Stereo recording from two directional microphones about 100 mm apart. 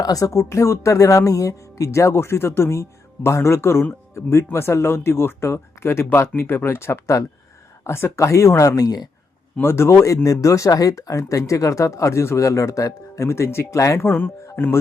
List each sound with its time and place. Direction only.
0.0 s speech: 35° left (ahead or behind)
9.6 s speech: 25° left (ahead or behind)